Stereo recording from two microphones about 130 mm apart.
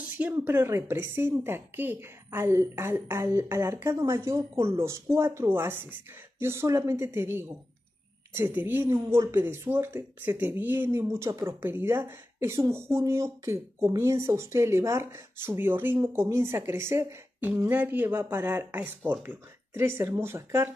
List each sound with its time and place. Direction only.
0.2 s speech: 15° right (ahead or behind)